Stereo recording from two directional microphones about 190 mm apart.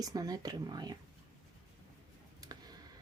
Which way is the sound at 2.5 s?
20° right (ahead or behind).